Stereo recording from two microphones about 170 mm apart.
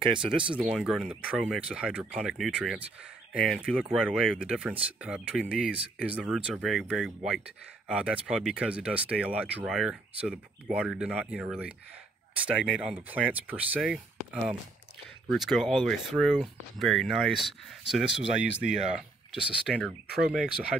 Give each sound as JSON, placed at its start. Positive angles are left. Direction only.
{"t": 0.0, "sound": "speech", "side_deg": -30}
{"t": 0.6, "sound": "speech", "side_deg": -5}
{"t": 18.8, "sound": "speech", "side_deg": -45}
{"t": 19.3, "sound": "speech", "side_deg": -5}